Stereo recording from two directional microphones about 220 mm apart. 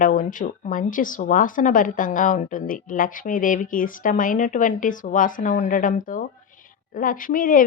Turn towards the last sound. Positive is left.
turn(degrees=40)  # may be behind; listen again after turning